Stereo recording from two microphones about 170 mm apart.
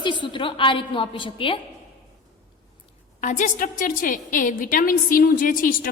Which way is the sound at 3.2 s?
50° left (ahead or behind).